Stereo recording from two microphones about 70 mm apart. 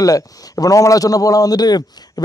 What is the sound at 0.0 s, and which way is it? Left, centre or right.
A man's voice, left.